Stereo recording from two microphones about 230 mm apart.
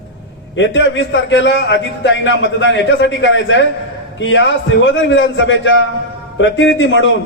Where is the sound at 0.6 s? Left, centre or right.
Left.